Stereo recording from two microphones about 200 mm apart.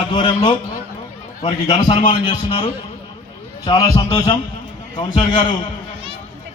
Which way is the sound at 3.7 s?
20° left (ahead or behind).